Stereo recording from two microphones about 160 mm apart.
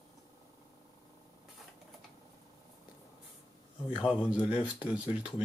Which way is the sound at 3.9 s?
5° right (ahead or behind).